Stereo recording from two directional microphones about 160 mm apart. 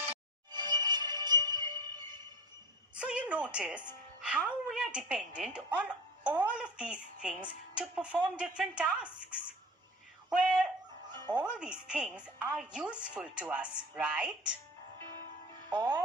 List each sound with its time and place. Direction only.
0.5 s music: 30° right (ahead or behind)
2.9 s a woman's voice: 5° right (ahead or behind)
10.2 s a woman's voice: 5° right (ahead or behind)
15.7 s speech: 25° right (ahead or behind)